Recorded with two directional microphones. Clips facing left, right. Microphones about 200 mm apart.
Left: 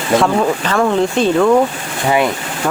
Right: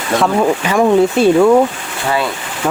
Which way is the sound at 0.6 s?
10° right (ahead or behind).